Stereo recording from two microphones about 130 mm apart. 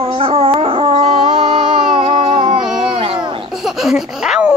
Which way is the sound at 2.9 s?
40° right (ahead or behind).